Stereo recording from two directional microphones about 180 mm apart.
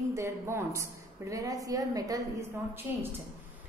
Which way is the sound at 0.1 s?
15° right (ahead or behind).